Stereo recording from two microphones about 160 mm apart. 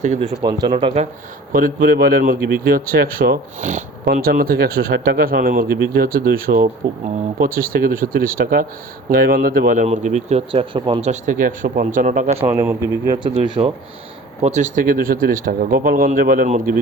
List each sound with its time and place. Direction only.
0.0 s speech: 45° right (ahead or behind)
0.4 s speech: 25° right (ahead or behind)
1.5 s speech: 65° right (ahead or behind)
4.0 s a man's voice: 70° right (ahead or behind)
9.8 s speech: 45° right (ahead or behind); by 11.0 s 30° right (ahead or behind)
11.0 s speech: 50° right (ahead or behind)
12.5 s a man's voice: 15° right (ahead or behind)
13.4 s speech: 30° right (ahead or behind)
14.4 s speech: 50° right (ahead or behind)